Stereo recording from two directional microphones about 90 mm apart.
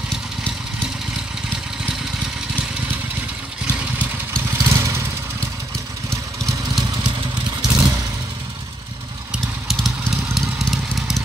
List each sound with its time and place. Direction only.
3.6 s vehicle: 10° right (ahead or behind)
4.6 s vehicle: 35° right (ahead or behind)
6.0 s vehicle: 5° left (ahead or behind)
7.6 s vehicle: 45° right (ahead or behind)
10.3 s vehicle: centre (ahead or behind)